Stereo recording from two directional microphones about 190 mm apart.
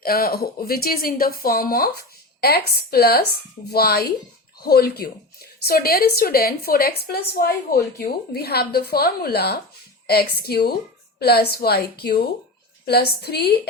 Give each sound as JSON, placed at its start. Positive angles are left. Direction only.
{"t": 0.0, "sound": "speech", "side_deg": 50}